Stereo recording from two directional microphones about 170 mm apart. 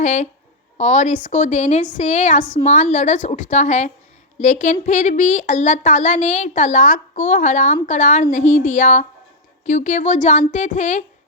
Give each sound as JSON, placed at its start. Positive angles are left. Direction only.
{"t": 0.0, "sound": "speech", "side_deg": 45}